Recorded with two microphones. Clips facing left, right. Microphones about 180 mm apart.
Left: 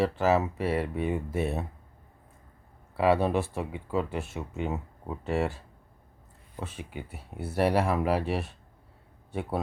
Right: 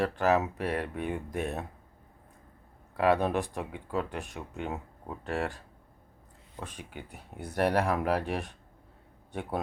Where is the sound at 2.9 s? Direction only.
5° left (ahead or behind).